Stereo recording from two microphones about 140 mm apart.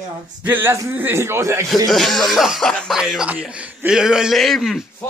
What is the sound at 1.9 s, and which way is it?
Speech, centre (ahead or behind).